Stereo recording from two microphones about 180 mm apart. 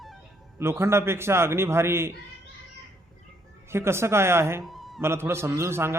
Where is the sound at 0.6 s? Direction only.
15° right (ahead or behind).